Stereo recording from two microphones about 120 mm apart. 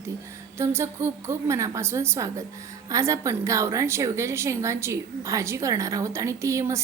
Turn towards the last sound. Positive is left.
turn(degrees=-25)  # may be behind; listen again after turning